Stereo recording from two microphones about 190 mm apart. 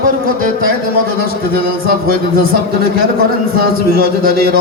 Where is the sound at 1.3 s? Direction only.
50° right (ahead or behind).